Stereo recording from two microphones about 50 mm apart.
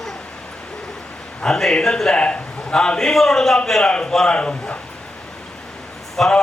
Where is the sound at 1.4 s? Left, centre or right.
Centre.